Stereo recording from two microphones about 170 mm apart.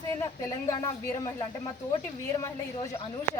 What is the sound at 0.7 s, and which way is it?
A woman's voice, 20° left (ahead or behind).